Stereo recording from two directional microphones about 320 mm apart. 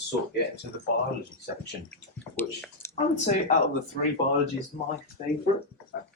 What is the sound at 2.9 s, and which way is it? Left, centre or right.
Speech, left.